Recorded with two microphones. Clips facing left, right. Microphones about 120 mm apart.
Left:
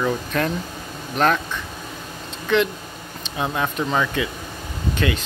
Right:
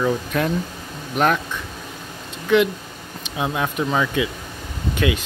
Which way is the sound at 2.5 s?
10° right (ahead or behind).